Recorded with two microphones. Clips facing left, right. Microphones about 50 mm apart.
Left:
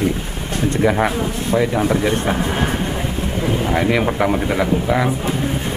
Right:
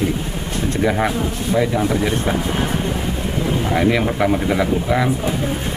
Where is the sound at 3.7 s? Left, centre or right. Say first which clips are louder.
Right 1 dB; centre.